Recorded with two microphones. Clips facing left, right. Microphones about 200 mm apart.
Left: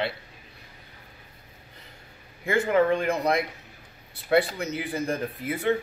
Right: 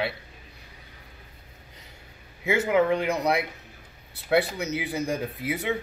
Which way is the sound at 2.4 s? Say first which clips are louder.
Even; 5° right (ahead or behind).